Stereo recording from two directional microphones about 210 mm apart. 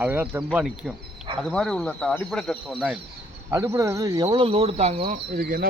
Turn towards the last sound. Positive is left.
turn(degrees=-45)  # may be behind; listen again after turning